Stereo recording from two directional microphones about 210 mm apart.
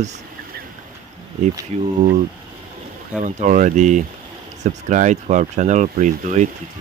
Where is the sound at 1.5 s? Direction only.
15° right (ahead or behind).